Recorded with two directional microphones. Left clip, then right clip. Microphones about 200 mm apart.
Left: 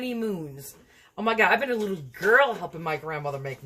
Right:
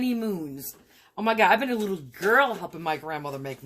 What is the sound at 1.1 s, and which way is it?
Speech, 40° right (ahead or behind).